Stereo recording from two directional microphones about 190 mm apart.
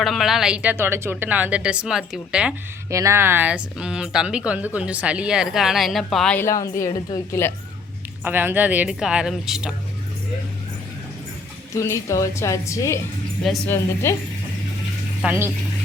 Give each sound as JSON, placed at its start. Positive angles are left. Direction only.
{"t": 0.0, "sound": "speech", "side_deg": 0}
{"t": 2.9, "sound": "speech", "side_deg": -15}
{"t": 8.2, "sound": "speech", "side_deg": -10}
{"t": 11.8, "sound": "a woman's voice", "side_deg": 15}
{"t": 15.2, "sound": "speech", "side_deg": -10}